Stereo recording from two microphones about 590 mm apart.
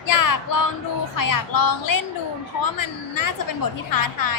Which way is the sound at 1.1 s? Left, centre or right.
Left.